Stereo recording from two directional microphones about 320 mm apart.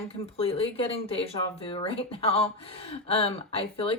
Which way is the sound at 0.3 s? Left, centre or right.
Centre.